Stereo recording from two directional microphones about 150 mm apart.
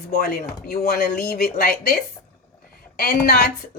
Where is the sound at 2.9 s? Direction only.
85° left.